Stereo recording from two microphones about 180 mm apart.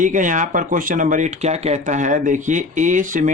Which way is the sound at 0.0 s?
45° right (ahead or behind).